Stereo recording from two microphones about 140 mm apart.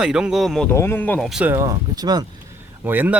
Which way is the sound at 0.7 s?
15° left (ahead or behind).